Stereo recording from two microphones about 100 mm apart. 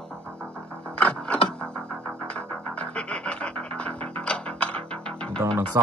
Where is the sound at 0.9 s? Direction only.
10° left (ahead or behind).